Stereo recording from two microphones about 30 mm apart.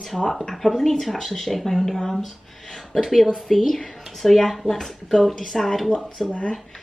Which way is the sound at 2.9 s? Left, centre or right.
Centre.